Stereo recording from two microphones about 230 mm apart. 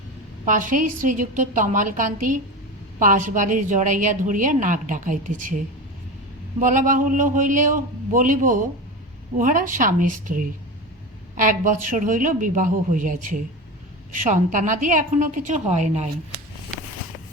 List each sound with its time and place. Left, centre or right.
0.4 s a woman's voice: right